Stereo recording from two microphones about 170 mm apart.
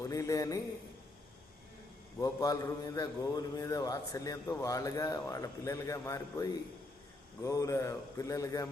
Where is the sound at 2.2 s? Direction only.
20° left (ahead or behind).